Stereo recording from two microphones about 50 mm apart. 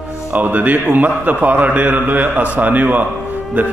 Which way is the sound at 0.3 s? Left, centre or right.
Right.